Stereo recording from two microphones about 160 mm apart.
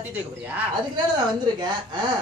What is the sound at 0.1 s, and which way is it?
Speech, 10° right (ahead or behind).